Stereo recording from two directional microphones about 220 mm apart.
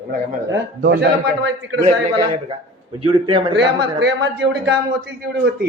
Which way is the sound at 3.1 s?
25° right (ahead or behind).